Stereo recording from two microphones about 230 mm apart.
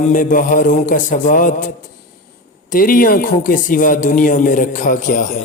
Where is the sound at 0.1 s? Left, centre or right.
Left.